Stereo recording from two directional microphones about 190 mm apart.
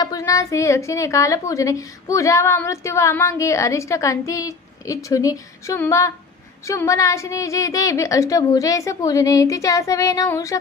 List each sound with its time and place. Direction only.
0.0 s a woman's voice: 20° left (ahead or behind)